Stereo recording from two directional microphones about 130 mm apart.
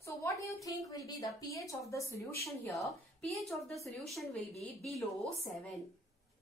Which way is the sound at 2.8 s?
Centre (ahead or behind).